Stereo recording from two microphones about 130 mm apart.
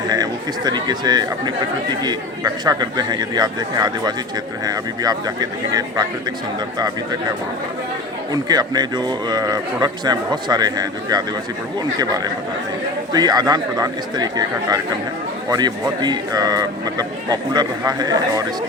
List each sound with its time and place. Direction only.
0.1 s speech: 30° right (ahead or behind)
8.3 s speech: 30° right (ahead or behind)